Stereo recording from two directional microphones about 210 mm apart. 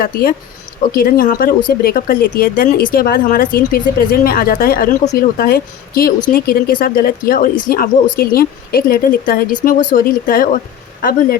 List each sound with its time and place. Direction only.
0.0 s speech: 45° left (ahead or behind)